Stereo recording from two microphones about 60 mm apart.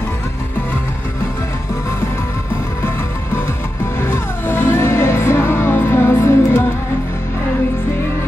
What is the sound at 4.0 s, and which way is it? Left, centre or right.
Music, left.